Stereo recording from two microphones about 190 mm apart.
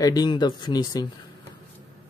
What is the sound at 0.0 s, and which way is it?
Speech, 20° left (ahead or behind).